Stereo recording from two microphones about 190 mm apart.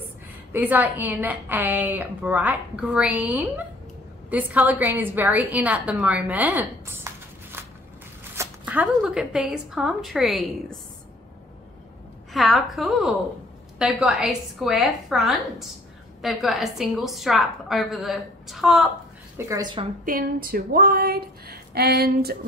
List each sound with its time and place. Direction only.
0.5 s a woman's voice: 10° right (ahead or behind)
12.3 s a woman's voice: centre (ahead or behind)
19.3 s speech: 20° right (ahead or behind)
20.1 s a sound: 50° right (ahead or behind)